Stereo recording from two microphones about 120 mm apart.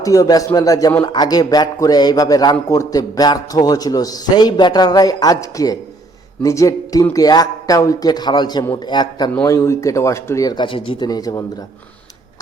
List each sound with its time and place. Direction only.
0.0 s a man's voice: 30° left (ahead or behind)
9.4 s speech: 25° left (ahead or behind)